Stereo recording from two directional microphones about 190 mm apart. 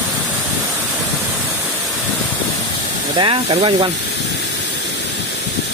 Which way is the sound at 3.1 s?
25° right (ahead or behind).